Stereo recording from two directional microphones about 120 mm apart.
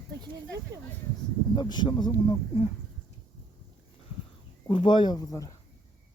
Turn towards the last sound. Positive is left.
turn(degrees=30)  # may be behind; listen again after turning